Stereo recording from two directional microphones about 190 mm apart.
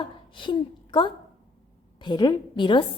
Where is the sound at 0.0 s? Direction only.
25° left (ahead or behind).